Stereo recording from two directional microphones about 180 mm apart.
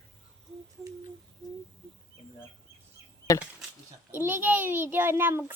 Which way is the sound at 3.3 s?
20° left (ahead or behind).